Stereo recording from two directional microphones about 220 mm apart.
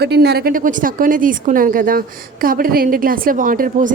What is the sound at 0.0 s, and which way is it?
A woman's voice, 50° right (ahead or behind).